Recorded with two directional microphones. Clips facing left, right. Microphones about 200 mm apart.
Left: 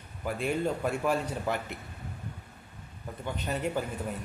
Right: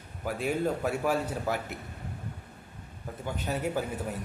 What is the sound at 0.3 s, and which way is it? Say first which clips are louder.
Speech: right 1 dB; 5° right (ahead or behind).